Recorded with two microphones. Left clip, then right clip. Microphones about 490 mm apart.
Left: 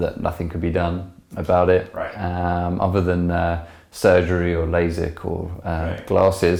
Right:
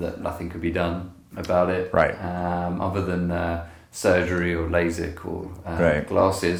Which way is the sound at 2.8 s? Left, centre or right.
Left.